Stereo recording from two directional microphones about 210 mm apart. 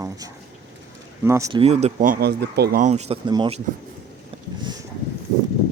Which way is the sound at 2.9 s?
30° right (ahead or behind).